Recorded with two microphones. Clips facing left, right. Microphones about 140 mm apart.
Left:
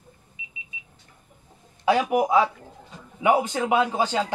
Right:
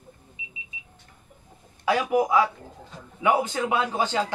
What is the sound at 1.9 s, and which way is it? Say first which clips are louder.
A man's voice: left 2 dB; 20° left (ahead or behind).